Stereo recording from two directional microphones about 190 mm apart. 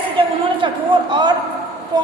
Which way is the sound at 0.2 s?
25° right (ahead or behind).